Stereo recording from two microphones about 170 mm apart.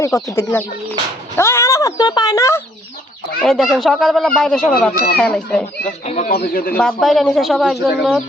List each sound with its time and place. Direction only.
0.1 s speech: 20° left (ahead or behind)
1.4 s speech: 15° left (ahead or behind)
3.4 s speech: centre (ahead or behind)
6.1 s speech: 45° left (ahead or behind)
6.3 s speech: 60° left (ahead or behind)
6.7 s speech: 5° left (ahead or behind)